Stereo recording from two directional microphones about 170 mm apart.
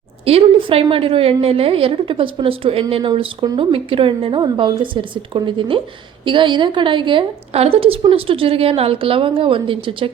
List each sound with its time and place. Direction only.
0.3 s a woman's voice: 35° right (ahead or behind)